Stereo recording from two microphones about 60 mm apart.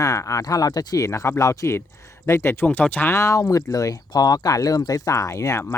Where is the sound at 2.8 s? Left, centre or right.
Left.